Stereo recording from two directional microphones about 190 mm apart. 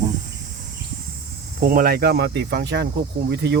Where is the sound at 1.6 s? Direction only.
50° right (ahead or behind).